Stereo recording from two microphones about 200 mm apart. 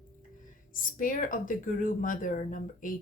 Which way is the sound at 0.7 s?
45° left (ahead or behind).